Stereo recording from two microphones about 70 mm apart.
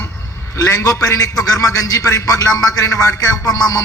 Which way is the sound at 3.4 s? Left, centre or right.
Left.